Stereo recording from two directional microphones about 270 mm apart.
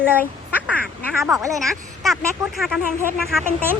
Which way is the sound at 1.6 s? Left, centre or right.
Centre.